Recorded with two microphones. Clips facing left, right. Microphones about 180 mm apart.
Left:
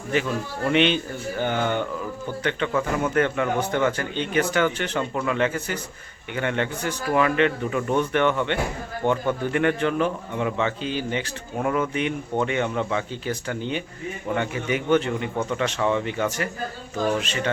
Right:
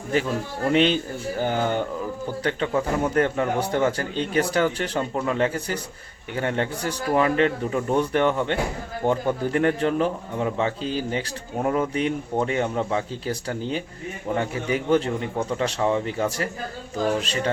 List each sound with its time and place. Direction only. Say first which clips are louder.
0.1 s speech: right 1 dB; 35° right (ahead or behind)